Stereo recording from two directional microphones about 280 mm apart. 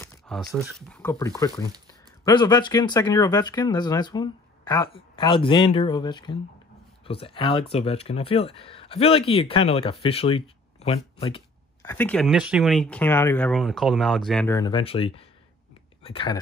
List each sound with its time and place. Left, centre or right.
0.0 s speech: centre
11.9 s speech: centre